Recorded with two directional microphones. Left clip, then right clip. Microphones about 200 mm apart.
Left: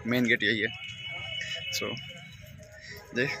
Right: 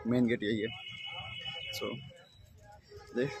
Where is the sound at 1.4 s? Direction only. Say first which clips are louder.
Left 8 dB; 10° right (ahead or behind).